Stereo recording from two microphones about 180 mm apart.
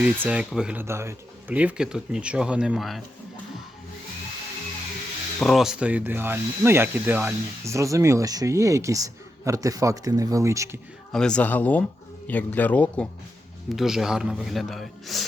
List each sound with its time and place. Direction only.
0.0 s speech: 5° right (ahead or behind)
5.4 s speech: centre (ahead or behind); by 10.8 s 15° right (ahead or behind)
11.1 s speech: 5° left (ahead or behind)
13.7 s speech: centre (ahead or behind)